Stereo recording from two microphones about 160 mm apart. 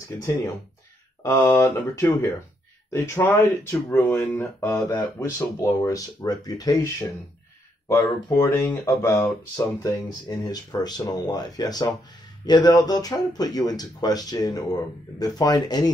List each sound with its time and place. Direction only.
1.2 s speech: 15° left (ahead or behind)
7.9 s speech: 15° left (ahead or behind)